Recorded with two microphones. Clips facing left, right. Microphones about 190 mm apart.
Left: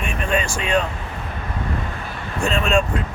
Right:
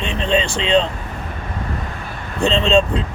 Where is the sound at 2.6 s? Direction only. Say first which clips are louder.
Right 4 dB; 20° right (ahead or behind).